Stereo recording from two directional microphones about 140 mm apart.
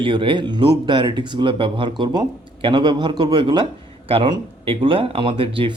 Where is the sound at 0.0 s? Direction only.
35° right (ahead or behind).